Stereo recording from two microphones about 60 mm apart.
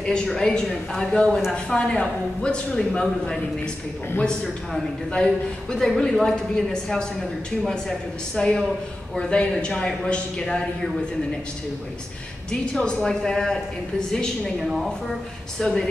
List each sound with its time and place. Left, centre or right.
0.0 s a woman's voice: centre
5.1 s a woman's voice: centre
8.4 s a woman's voice: centre
12.4 s a woman's voice: centre
14.6 s a woman's voice: centre